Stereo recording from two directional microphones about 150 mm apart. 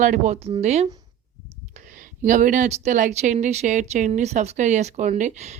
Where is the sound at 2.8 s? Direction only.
55° right (ahead or behind).